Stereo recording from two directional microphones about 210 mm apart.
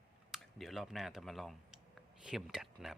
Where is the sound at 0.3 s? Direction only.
Centre (ahead or behind).